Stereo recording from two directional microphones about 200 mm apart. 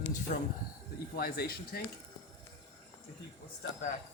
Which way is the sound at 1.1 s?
50° left (ahead or behind).